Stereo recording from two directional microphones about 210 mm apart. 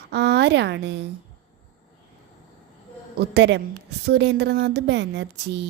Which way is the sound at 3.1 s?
55° right (ahead or behind).